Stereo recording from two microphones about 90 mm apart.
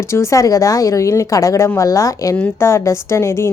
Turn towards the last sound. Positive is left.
turn(degrees=30)  # may be behind; listen again after turning